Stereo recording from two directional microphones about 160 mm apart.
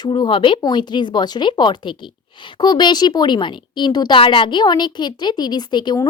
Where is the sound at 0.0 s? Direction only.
30° left (ahead or behind).